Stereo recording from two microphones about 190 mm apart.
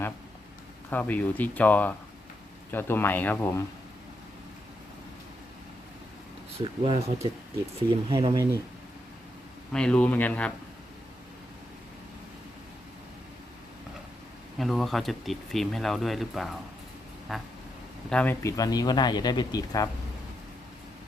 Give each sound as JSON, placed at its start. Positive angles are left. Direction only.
{"t": 0.9, "sound": "speech", "side_deg": 10}
{"t": 6.6, "sound": "speech", "side_deg": -30}
{"t": 9.7, "sound": "speech", "side_deg": 5}
{"t": 14.6, "sound": "speech", "side_deg": 0}